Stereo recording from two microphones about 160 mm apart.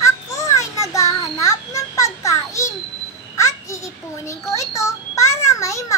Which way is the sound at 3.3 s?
20° left (ahead or behind).